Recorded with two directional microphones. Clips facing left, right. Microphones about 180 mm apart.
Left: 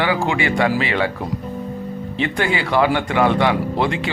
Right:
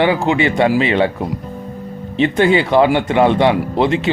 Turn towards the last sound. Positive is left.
turn(degrees=-20)  # may be behind; listen again after turning